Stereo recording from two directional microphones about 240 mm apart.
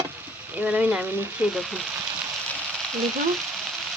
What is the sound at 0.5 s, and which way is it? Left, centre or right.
A woman's voice, centre.